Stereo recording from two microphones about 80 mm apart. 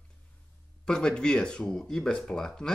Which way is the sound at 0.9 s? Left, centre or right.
Centre.